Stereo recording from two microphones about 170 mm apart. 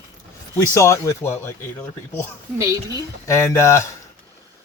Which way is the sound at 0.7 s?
15° left (ahead or behind).